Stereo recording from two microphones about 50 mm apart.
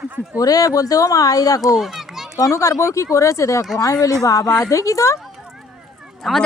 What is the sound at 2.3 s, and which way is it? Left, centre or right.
Speech, left.